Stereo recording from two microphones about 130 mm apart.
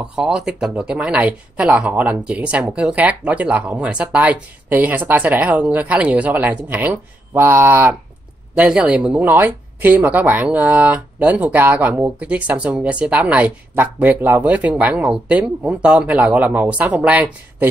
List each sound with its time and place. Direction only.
0.0 s speech: 5° right (ahead or behind)